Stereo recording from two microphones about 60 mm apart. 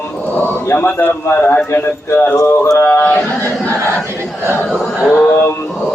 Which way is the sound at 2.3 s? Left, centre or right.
Left.